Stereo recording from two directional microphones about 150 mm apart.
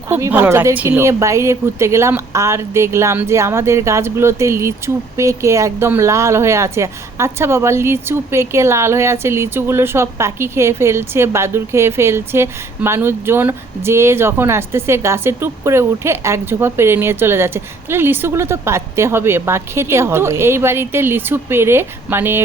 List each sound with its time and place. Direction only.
0.1 s a woman's voice: 10° right (ahead or behind)